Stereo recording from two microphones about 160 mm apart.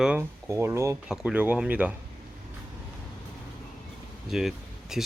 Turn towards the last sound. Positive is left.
turn(degrees=0)  # may be behind; listen again after turning